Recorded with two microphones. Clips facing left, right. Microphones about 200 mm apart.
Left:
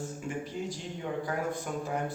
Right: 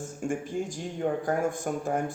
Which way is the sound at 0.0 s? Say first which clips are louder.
Right 4 dB; 50° right (ahead or behind).